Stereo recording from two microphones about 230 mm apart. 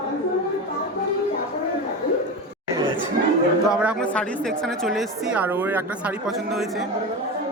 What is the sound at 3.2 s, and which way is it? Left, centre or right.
Chatter, right.